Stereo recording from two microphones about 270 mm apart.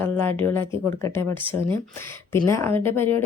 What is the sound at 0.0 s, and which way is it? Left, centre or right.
A woman's voice, centre.